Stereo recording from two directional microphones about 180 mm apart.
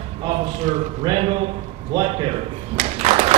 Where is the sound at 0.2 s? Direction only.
35° right (ahead or behind).